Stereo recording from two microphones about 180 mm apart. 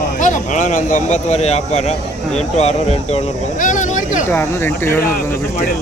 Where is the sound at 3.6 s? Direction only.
45° left (ahead or behind).